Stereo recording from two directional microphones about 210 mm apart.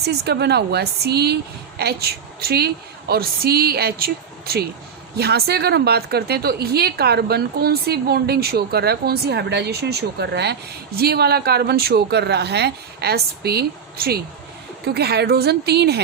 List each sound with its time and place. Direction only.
0.0 s a woman's voice: 50° right (ahead or behind)